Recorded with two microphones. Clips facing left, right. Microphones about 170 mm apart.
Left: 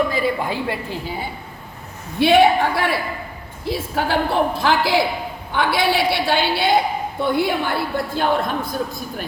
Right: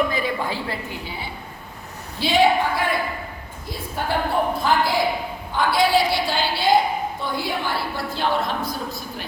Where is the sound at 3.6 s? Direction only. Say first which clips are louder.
Left 5 dB; 90° left.